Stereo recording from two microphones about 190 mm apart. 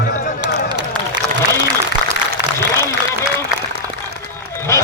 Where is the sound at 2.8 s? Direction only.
15° left (ahead or behind).